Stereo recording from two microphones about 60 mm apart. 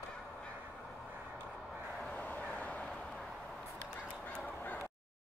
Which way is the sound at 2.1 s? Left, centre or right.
Left.